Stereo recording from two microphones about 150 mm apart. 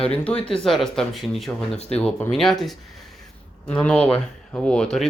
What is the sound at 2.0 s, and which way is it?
Speech, 10° left (ahead or behind).